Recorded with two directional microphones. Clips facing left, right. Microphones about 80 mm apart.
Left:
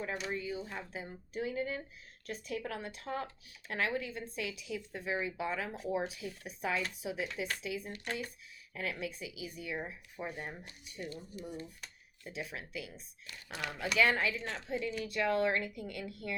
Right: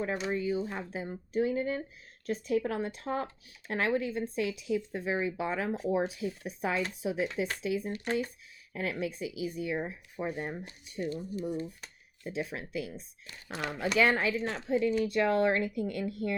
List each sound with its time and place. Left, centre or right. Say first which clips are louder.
0.0 s speech: right 6 dB; right